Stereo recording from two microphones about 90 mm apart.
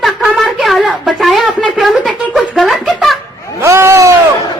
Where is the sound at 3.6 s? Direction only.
30° right (ahead or behind).